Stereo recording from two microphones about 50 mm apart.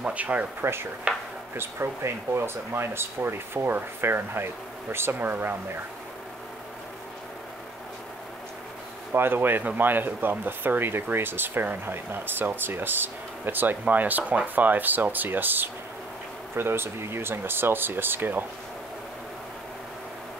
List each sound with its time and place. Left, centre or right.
0.0 s speech: right
0.6 s speech: right
1.1 s speech: right
1.5 s speech: right
9.1 s speech: right
16.5 s speech: right